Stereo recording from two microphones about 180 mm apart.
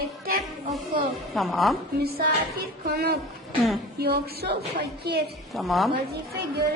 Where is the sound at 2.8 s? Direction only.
60° right (ahead or behind).